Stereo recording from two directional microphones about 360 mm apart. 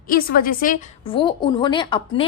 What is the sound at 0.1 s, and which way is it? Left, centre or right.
A woman's voice, left.